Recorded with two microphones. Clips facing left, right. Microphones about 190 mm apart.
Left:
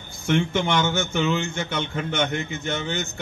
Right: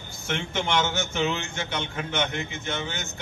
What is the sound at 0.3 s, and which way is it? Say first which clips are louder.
A man's voice: left 6 dB; 55° left (ahead or behind).